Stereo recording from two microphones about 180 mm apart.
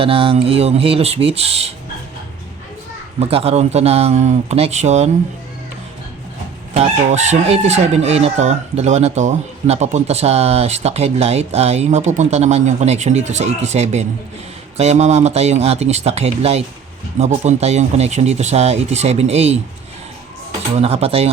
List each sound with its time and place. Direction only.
0.0 s chicken: 30° right (ahead or behind)
3.2 s chicken: 35° right (ahead or behind)
6.7 s chicken: 40° right (ahead or behind)
20.7 s chicken: 35° right (ahead or behind)